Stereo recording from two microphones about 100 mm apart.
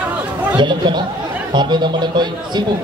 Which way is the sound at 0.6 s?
50° right (ahead or behind).